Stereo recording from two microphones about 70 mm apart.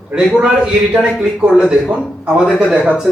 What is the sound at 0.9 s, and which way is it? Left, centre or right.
Speech, centre.